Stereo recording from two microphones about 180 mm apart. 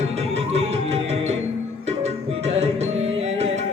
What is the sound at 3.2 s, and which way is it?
Music, 35° right (ahead or behind).